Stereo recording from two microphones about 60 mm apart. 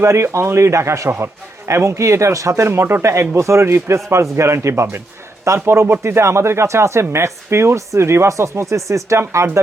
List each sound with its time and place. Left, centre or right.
0.0 s a man's voice: right